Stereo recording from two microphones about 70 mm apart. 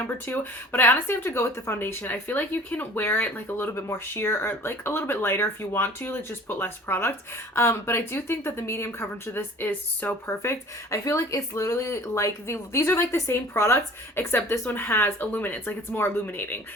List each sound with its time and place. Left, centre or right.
0.3 s speech: left
10.4 s speech: left